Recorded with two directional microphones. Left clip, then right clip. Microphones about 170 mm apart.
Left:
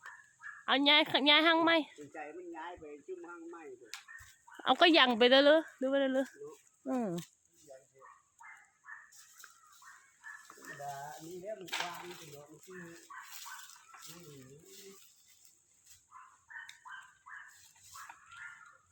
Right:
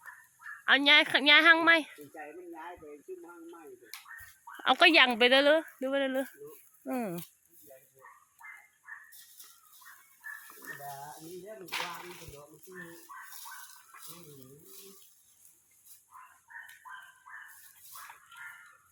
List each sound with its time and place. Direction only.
0.6 s speech: 10° left (ahead or behind)
2.1 s speech: 5° right (ahead or behind)
4.5 s speech: 15° left (ahead or behind)
8.0 s a sound: 50° right (ahead or behind)